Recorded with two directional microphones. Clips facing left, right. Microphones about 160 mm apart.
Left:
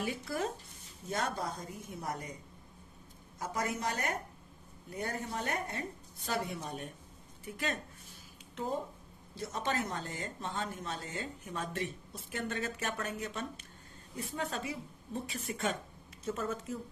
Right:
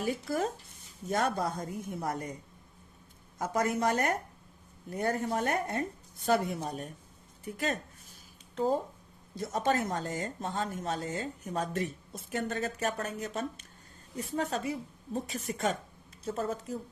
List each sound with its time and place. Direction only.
0.0 s speech: 40° right (ahead or behind)
1.1 s a woman's voice: 55° right (ahead or behind)
3.3 s a woman's voice: 50° right (ahead or behind)
6.5 s speech: 40° right (ahead or behind)
7.4 s a sound: 40° right (ahead or behind)
9.3 s speech: 45° right (ahead or behind)